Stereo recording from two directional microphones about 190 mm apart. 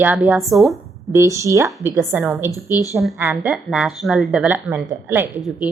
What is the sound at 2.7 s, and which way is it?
Speech, 15° left (ahead or behind).